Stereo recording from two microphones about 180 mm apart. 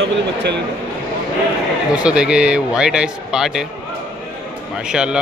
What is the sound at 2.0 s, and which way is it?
A man's voice, 5° right (ahead or behind).